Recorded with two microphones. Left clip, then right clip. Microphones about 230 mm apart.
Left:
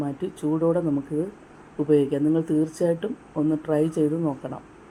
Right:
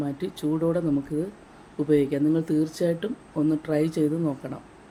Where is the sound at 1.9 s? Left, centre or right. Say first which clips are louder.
Left 2 dB; centre.